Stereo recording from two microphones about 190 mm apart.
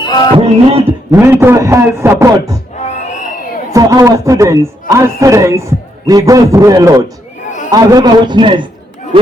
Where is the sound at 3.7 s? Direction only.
20° right (ahead or behind).